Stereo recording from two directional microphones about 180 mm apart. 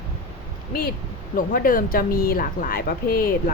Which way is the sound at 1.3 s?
50° left (ahead or behind).